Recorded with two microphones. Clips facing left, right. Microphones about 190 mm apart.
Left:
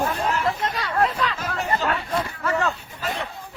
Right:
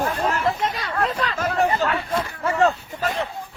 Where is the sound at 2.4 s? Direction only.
25° right (ahead or behind).